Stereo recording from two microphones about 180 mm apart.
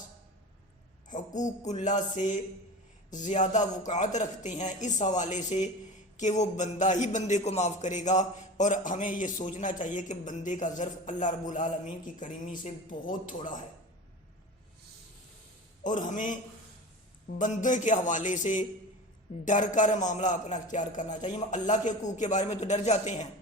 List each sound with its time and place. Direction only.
1.1 s a man's voice: 45° left (ahead or behind)
15.8 s a man's voice: 45° left (ahead or behind)